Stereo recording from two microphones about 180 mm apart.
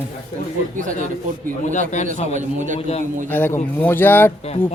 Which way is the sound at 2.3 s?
45° right (ahead or behind).